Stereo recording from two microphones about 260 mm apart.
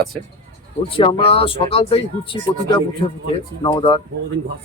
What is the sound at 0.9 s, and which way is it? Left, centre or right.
Speech, centre.